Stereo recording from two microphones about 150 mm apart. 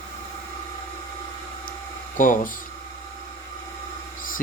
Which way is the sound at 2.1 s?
60° left (ahead or behind).